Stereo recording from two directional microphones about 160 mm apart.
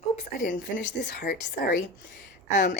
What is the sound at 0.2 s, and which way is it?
Speech, 55° left (ahead or behind).